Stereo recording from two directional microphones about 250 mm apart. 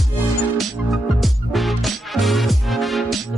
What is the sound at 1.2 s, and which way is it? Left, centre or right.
Music, centre.